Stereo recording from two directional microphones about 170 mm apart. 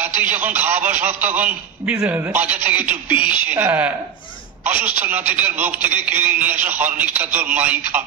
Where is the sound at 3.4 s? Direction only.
10° right (ahead or behind).